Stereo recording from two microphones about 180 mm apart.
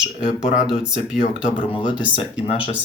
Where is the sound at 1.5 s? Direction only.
25° left (ahead or behind).